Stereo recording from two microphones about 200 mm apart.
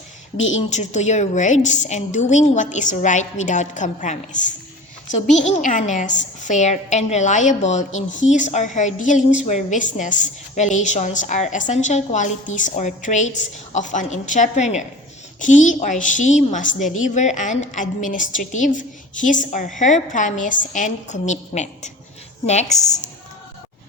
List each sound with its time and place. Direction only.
0.3 s a woman's voice: 75° left (ahead or behind)
0.7 s a woman's voice: 35° left (ahead or behind)